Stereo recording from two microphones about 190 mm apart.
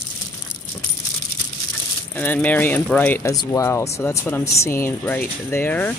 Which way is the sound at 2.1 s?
10° left (ahead or behind).